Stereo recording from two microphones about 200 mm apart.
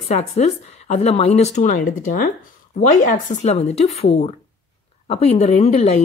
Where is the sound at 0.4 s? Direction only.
35° left (ahead or behind).